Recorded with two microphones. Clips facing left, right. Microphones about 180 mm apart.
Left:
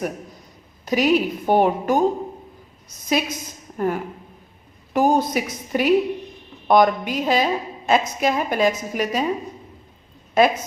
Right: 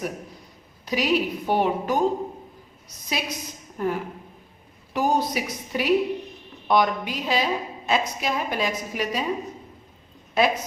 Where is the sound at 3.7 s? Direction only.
50° left (ahead or behind).